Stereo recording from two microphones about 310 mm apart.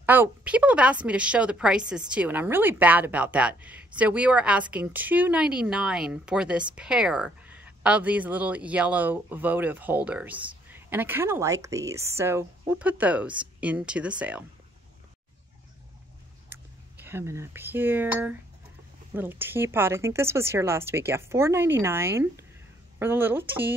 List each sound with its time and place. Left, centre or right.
0.0 s a woman's voice: centre
17.0 s speech: centre